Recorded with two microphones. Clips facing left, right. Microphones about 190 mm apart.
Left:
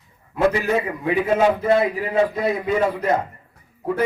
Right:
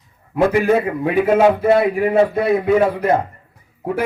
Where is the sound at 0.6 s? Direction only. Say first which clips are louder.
Right 5 dB; 60° right (ahead or behind).